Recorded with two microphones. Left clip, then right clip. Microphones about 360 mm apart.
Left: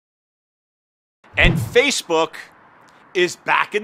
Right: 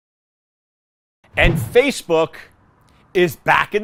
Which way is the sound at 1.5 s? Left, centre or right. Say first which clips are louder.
Even; centre.